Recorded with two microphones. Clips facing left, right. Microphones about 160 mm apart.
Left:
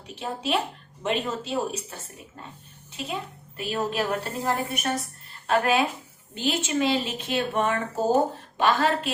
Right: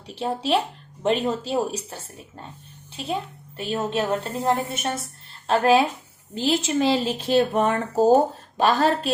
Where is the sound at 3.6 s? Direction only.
25° right (ahead or behind).